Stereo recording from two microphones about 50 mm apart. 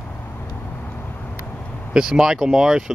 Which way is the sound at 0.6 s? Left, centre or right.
Left.